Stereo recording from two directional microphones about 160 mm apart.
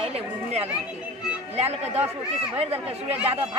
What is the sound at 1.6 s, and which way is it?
Speech, 40° right (ahead or behind).